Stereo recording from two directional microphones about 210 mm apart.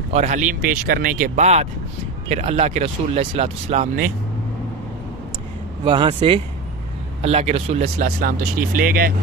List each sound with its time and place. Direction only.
0.1 s speech: 35° right (ahead or behind)
5.9 s speech: 25° right (ahead or behind); by 9.1 s 40° right (ahead or behind)